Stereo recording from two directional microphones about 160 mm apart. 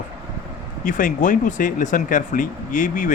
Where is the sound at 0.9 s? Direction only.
55° left (ahead or behind).